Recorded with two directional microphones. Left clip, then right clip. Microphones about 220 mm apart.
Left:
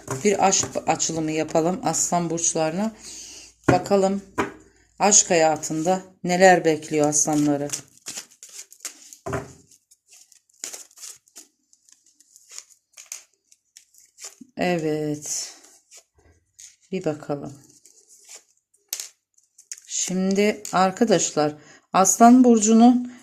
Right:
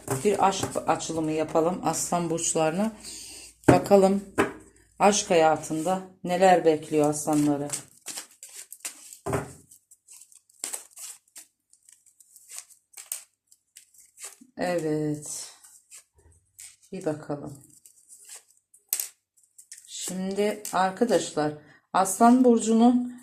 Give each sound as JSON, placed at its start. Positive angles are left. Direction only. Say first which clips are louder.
{"t": 0.2, "sound": "speech", "louder": "left 4 dB", "side_deg": 40}
{"t": 1.9, "sound": "speech", "louder": "left 3 dB", "side_deg": 25}
{"t": 4.7, "sound": "a sound", "louder": "left 4 dB", "side_deg": 10}
{"t": 5.3, "sound": "speech", "louder": "left 2 dB", "side_deg": 25}
{"t": 14.5, "sound": "speech", "louder": "left 3 dB", "side_deg": 50}
{"t": 16.9, "sound": "speech", "louder": "left 4 dB", "side_deg": 50}
{"t": 19.6, "sound": "speech", "louder": "left 8 dB", "side_deg": 50}